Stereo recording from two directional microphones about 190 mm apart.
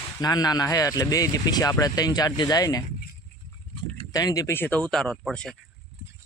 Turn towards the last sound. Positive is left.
turn(degrees=5)  # may be behind; listen again after turning